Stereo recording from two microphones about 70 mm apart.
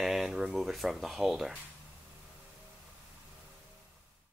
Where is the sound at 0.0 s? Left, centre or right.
Centre.